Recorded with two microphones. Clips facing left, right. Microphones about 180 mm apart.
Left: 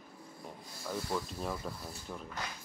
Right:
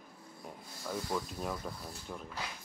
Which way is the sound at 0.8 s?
Centre (ahead or behind).